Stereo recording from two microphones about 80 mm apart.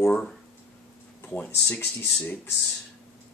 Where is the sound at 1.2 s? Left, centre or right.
Left.